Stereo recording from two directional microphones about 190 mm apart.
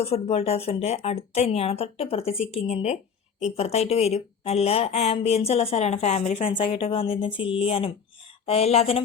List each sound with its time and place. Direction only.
0.0 s speech: 35° left (ahead or behind)